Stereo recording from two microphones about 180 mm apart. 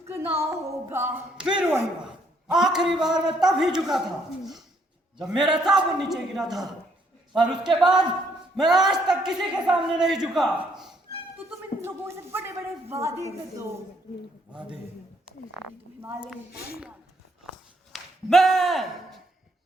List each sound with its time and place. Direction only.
0.3 s a man's voice: 15° right (ahead or behind)
5.2 s a man's voice: 5° right (ahead or behind)
11.8 s speech: 15° right (ahead or behind)
16.0 s speech: 15° right (ahead or behind)
16.6 s speech: 60° left (ahead or behind)
17.9 s speech: centre (ahead or behind)